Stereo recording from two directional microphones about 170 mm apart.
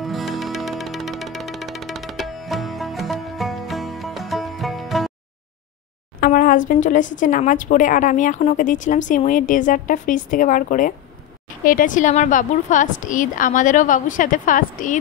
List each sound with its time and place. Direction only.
0.0 s music: centre (ahead or behind)
6.2 s a woman's voice: 55° left (ahead or behind)